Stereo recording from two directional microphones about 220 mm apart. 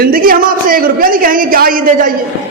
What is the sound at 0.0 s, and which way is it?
A man's voice, 40° right (ahead or behind).